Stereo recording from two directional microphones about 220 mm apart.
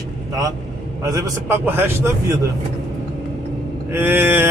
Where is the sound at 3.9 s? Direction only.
10° right (ahead or behind).